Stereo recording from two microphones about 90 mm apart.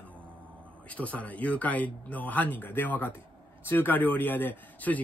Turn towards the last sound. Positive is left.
turn(degrees=20)  # may be behind; listen again after turning